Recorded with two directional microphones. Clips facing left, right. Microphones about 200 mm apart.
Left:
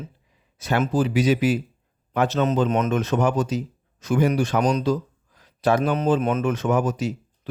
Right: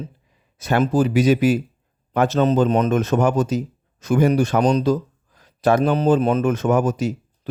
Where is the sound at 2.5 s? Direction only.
35° right (ahead or behind).